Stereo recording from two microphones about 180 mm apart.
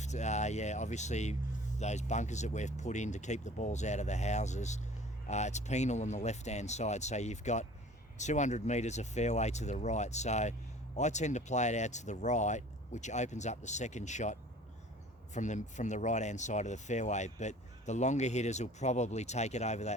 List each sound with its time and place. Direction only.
0.0 s speech: 40° left (ahead or behind)